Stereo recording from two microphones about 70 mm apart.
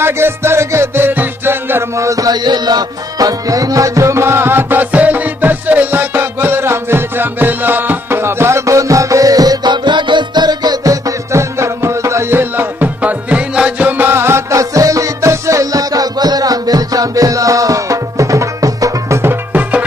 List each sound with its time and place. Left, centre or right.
0.0 s music: right
14.6 s music: right